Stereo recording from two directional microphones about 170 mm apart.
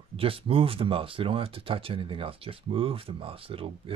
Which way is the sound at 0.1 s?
35° right (ahead or behind).